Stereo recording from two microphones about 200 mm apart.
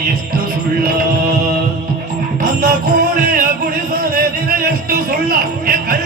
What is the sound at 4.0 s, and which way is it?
Music, 50° right (ahead or behind).